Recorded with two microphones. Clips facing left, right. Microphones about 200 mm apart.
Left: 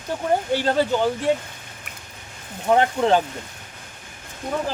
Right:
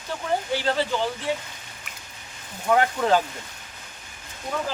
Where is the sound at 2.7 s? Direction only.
25° left (ahead or behind).